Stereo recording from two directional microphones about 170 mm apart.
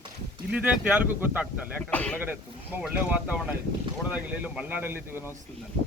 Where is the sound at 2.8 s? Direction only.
5° right (ahead or behind).